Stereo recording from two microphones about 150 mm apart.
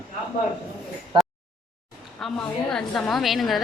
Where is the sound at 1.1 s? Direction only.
30° right (ahead or behind).